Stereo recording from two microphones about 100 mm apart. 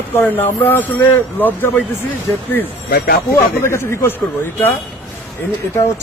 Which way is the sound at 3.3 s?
25° left (ahead or behind).